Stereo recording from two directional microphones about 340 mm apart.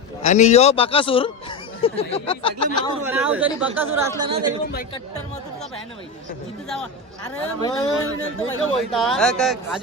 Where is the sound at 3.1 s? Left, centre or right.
Centre.